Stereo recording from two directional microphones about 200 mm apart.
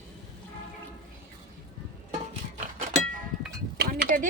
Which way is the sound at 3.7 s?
50° right (ahead or behind).